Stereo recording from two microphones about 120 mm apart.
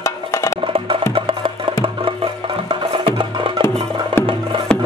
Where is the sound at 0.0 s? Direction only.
25° left (ahead or behind).